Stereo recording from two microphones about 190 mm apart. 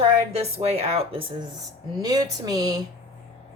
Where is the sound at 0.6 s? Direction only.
35° right (ahead or behind).